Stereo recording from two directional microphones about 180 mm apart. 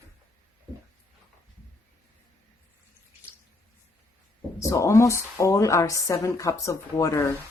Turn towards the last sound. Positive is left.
turn(degrees=15)  # may be behind; listen again after turning